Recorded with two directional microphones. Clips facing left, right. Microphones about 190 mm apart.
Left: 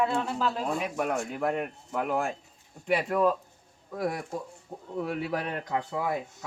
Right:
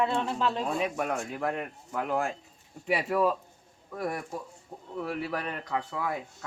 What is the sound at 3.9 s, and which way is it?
Speech, 10° left (ahead or behind).